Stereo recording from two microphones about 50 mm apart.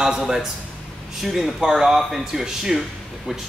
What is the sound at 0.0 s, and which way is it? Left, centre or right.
Speech, centre.